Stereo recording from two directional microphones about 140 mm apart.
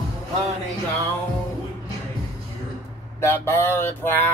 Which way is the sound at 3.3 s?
15° left (ahead or behind).